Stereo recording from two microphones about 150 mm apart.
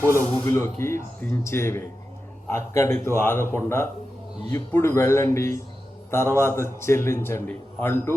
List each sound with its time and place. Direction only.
0.0 s a man's voice: 15° left (ahead or behind)